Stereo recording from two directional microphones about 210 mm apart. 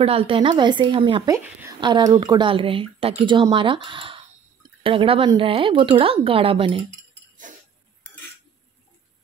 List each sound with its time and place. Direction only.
0.0 s speech: 25° right (ahead or behind)